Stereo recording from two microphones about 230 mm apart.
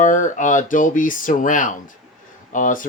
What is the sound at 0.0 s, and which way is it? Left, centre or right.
Speech, left.